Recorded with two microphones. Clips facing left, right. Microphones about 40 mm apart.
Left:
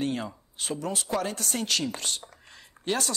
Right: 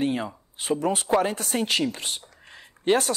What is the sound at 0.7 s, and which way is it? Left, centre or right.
Speech, right.